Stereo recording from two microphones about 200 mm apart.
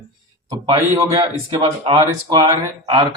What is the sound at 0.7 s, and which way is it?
A man's voice, 15° right (ahead or behind).